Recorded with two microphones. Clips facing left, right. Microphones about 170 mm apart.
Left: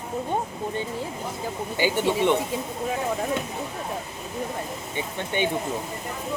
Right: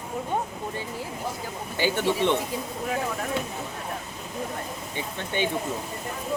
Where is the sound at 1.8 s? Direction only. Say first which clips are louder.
Left 1 dB; 15° left (ahead or behind).